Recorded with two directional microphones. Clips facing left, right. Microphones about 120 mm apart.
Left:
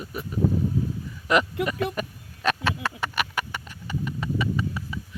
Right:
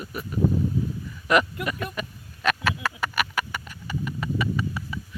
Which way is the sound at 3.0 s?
15° left (ahead or behind).